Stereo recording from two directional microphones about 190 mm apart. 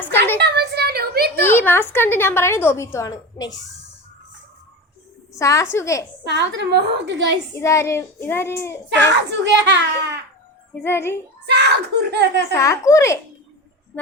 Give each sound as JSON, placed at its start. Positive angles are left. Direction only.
{"t": 0.0, "sound": "a sound", "side_deg": 10}
{"t": 0.3, "sound": "a sound", "side_deg": -60}
{"t": 1.4, "sound": "a woman's voice", "side_deg": 10}
{"t": 5.4, "sound": "a woman's voice", "side_deg": 15}
{"t": 6.2, "sound": "speech", "side_deg": -65}
{"t": 7.6, "sound": "a woman's voice", "side_deg": 15}
{"t": 9.1, "sound": "a child's voice", "side_deg": -70}
{"t": 10.8, "sound": "a woman's voice", "side_deg": 15}
{"t": 11.4, "sound": "speech", "side_deg": -60}
{"t": 12.5, "sound": "a woman's voice", "side_deg": 15}
{"t": 13.9, "sound": "a sound", "side_deg": 10}